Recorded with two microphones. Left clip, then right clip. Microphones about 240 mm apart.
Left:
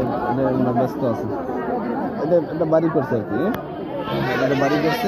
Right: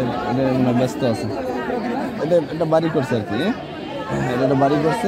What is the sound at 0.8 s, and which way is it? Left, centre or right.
Speech, right.